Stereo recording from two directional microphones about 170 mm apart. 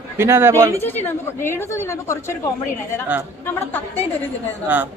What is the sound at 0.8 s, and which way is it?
A woman's voice, 10° left (ahead or behind).